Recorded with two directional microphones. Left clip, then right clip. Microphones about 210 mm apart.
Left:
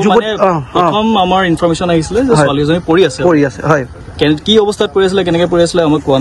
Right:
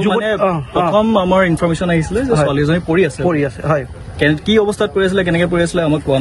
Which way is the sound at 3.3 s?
40° left (ahead or behind).